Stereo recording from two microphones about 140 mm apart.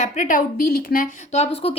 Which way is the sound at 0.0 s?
70° left (ahead or behind).